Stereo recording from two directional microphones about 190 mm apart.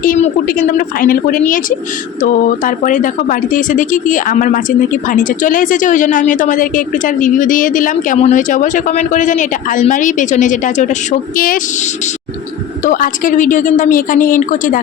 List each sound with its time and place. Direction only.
0.0 s a woman's voice: 45° left (ahead or behind)
2.6 s a woman's voice: 45° left (ahead or behind)